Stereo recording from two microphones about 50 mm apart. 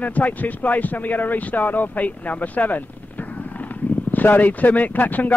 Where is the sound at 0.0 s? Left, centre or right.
Left.